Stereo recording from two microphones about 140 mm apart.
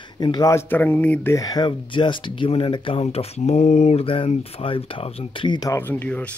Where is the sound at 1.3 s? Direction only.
25° left (ahead or behind).